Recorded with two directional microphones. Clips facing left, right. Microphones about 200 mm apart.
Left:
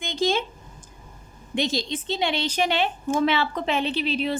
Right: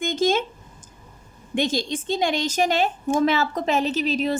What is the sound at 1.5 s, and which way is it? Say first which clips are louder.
A woman's voice: right 2 dB; 50° right (ahead or behind).